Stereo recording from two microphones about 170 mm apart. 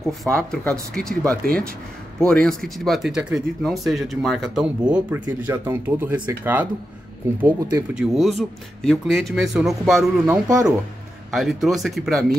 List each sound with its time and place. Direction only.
0.0 s speech: 5° left (ahead or behind)
10.2 s speech: 15° right (ahead or behind)
11.3 s speech: centre (ahead or behind)